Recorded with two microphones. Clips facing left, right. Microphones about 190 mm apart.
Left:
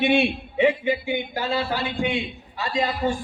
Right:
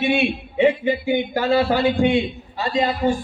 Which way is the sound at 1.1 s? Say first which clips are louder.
Right 7 dB; 50° right (ahead or behind).